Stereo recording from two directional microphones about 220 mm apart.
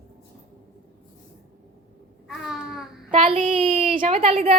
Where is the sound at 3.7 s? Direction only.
40° right (ahead or behind).